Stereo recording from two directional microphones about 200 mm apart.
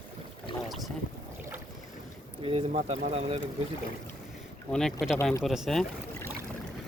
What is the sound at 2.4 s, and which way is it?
Speech, 30° right (ahead or behind).